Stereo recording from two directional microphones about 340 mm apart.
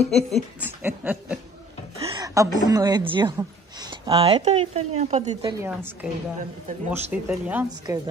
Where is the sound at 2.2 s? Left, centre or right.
Centre.